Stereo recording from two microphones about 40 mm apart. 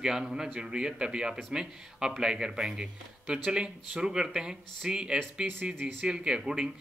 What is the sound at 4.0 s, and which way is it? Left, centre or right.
Speech, centre.